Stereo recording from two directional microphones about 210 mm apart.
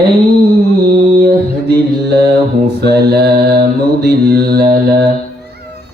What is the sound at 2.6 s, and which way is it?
Mantra, 50° right (ahead or behind).